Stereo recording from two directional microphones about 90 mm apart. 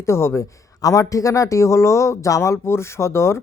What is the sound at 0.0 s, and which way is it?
Speech, 30° left (ahead or behind).